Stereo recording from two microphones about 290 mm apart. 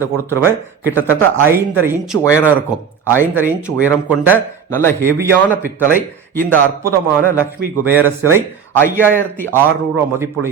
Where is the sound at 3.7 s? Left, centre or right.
Centre.